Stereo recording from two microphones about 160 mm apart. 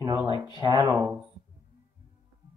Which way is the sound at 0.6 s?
25° right (ahead or behind).